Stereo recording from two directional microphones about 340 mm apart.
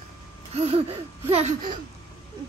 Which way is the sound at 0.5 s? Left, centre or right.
Centre.